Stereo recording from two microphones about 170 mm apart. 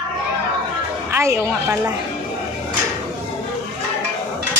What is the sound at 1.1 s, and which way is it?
Speech, 15° right (ahead or behind).